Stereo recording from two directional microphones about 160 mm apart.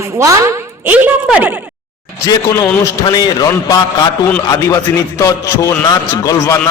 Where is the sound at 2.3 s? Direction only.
25° left (ahead or behind).